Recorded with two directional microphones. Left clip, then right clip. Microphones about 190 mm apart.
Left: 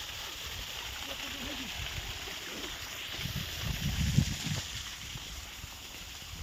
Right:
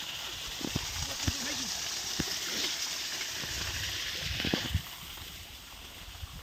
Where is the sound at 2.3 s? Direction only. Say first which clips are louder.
Right 6 dB; 30° right (ahead or behind).